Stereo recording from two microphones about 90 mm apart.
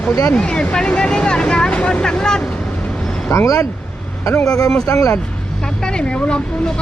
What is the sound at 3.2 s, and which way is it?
Speech, 35° left (ahead or behind).